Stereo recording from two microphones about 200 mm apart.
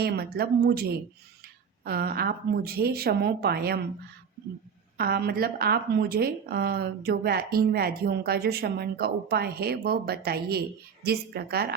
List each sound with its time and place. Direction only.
0.0 s a woman's voice: 55° right (ahead or behind)
4.9 s a woman's voice: 50° right (ahead or behind)